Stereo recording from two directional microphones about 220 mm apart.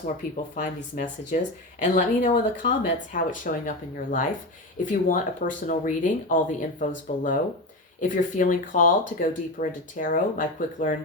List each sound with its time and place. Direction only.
0.5 s speech: 35° left (ahead or behind)